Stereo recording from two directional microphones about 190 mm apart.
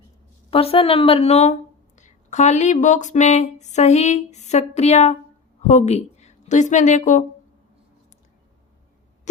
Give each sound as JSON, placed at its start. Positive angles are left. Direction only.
{"t": 0.5, "sound": "speech", "side_deg": 30}